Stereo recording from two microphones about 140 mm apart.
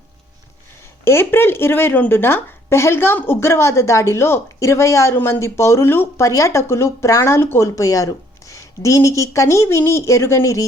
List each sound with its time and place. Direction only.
1.0 s speech: 15° left (ahead or behind)